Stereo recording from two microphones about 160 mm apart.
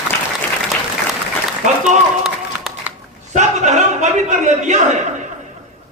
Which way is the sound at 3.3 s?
50° right (ahead or behind).